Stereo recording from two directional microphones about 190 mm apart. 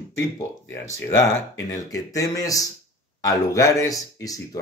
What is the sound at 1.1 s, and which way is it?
Speech, 15° left (ahead or behind).